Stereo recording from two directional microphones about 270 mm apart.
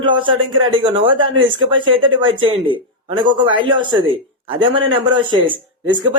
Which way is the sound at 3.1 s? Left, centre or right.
Centre.